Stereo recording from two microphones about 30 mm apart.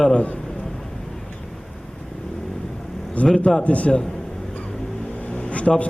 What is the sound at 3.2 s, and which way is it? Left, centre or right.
Speech, left.